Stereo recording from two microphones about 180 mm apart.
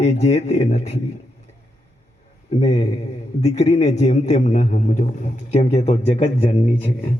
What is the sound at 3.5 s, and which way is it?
A man's voice, 40° left (ahead or behind).